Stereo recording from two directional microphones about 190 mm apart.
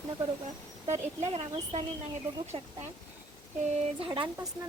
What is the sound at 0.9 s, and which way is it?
Speech, 35° right (ahead or behind).